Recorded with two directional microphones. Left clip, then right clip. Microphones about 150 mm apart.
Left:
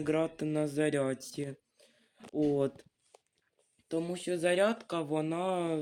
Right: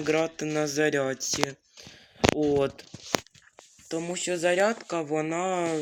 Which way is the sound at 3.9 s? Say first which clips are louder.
Right 4 dB; 25° right (ahead or behind).